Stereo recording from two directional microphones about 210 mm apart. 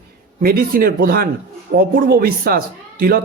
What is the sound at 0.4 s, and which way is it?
Speech, 45° right (ahead or behind).